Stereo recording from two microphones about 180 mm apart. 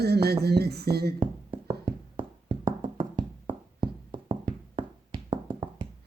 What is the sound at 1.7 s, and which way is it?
Music, 25° right (ahead or behind).